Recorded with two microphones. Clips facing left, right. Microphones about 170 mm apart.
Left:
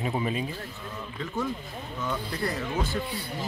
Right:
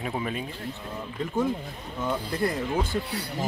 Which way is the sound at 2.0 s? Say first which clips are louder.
Right 4 dB; 25° right (ahead or behind).